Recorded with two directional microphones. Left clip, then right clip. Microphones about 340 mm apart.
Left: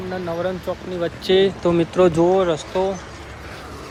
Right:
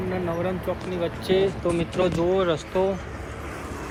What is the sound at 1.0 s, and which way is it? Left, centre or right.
Speech, left.